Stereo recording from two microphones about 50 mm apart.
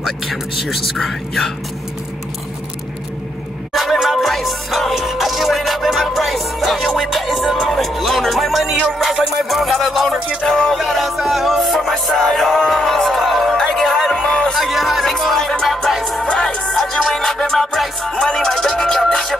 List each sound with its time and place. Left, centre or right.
0.0 s music: centre
3.7 s music: centre
14.5 s speech: centre
15.6 s music: centre
16.2 s music: centre